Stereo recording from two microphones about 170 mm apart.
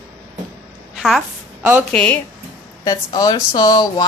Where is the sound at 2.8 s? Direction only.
20° left (ahead or behind).